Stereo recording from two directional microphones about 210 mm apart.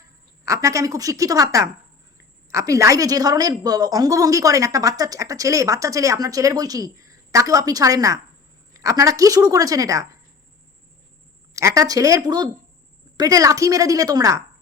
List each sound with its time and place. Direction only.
0.4 s a woman's voice: 15° right (ahead or behind)
11.5 s a woman's voice: 15° right (ahead or behind)